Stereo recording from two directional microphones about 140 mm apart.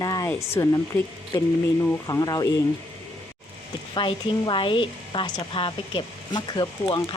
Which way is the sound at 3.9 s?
35° left (ahead or behind).